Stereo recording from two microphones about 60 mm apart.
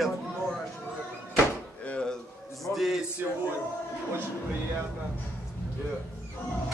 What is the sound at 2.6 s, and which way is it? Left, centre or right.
Speech, centre.